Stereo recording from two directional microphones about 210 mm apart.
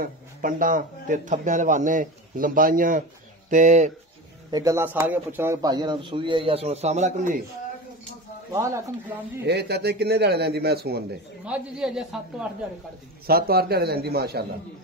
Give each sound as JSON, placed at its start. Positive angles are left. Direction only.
{"t": 0.0, "sound": "a man's voice", "side_deg": -40}
{"t": 4.5, "sound": "speech", "side_deg": -15}
{"t": 8.5, "sound": "speech", "side_deg": -15}
{"t": 9.4, "sound": "speech", "side_deg": -50}
{"t": 11.4, "sound": "speech", "side_deg": -5}
{"t": 13.3, "sound": "speech", "side_deg": -45}